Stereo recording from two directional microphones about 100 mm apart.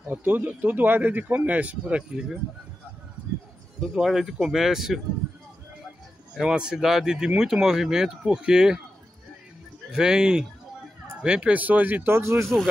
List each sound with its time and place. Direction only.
0.1 s speech: 15° right (ahead or behind)
3.8 s speech: 5° right (ahead or behind)
6.3 s speech: 5° right (ahead or behind)
9.9 s speech: 5° right (ahead or behind); by 12.5 s 25° right (ahead or behind)